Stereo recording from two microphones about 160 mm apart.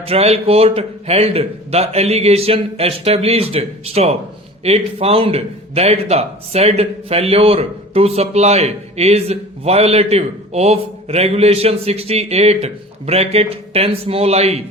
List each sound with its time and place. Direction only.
0.0 s speech: 40° right (ahead or behind)